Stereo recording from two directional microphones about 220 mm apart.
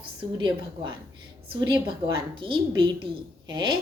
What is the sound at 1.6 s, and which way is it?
A woman's voice, 20° right (ahead or behind).